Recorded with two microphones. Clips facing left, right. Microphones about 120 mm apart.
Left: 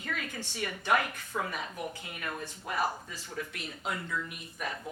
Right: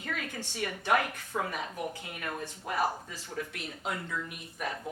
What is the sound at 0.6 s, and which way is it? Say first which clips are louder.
Speech: right 1 dB; 50° right (ahead or behind).